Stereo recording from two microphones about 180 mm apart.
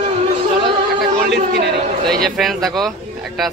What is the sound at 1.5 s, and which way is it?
Chatter, 70° right (ahead or behind).